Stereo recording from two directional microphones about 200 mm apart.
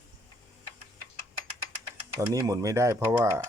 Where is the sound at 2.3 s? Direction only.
15° right (ahead or behind).